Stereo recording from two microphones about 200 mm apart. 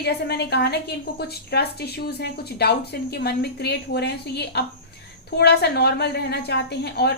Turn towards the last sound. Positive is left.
turn(degrees=55)  # may be behind; listen again after turning